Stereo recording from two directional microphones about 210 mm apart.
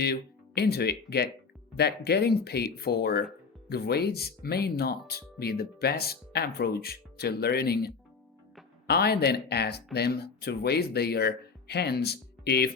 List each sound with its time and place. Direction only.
0.6 s speech: 50° left (ahead or behind)